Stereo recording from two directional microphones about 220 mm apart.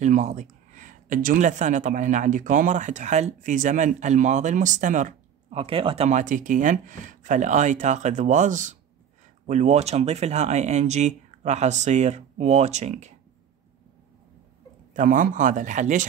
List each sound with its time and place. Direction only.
0.0 s speech: 35° right (ahead or behind)
15.0 s speech: 40° right (ahead or behind)